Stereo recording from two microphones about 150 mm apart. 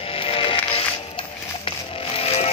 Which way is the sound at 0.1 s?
40° left (ahead or behind).